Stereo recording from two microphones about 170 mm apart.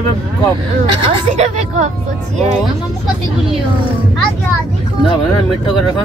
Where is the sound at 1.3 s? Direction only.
45° right (ahead or behind).